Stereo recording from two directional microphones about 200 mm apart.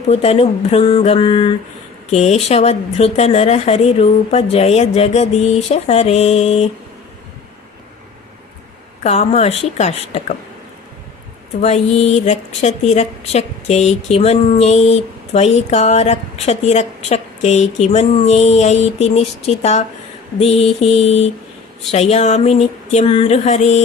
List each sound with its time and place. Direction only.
0.1 s a woman's voice: 30° left (ahead or behind)
9.0 s a woman's voice: 35° left (ahead or behind)
11.6 s a woman's voice: 30° left (ahead or behind)